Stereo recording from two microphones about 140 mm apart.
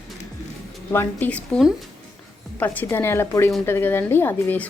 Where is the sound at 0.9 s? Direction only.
15° left (ahead or behind).